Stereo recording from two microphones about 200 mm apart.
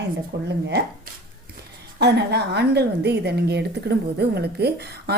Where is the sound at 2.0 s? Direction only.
55° right (ahead or behind).